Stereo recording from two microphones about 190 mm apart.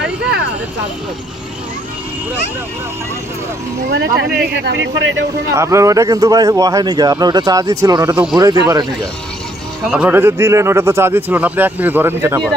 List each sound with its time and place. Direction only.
3.8 s speech: 65° right (ahead or behind)
5.5 s speech: 15° right (ahead or behind)
9.8 s speech: 5° right (ahead or behind)